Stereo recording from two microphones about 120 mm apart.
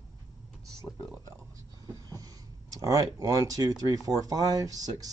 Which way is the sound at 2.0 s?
30° right (ahead or behind).